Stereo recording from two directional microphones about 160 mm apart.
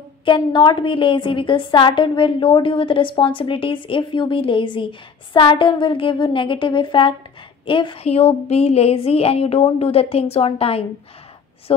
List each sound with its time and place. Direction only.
0.2 s a woman's voice: 30° left (ahead or behind)